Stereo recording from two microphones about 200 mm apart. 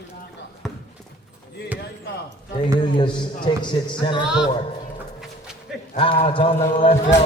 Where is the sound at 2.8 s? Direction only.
25° left (ahead or behind).